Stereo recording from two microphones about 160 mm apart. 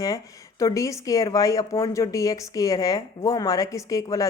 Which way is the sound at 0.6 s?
20° left (ahead or behind).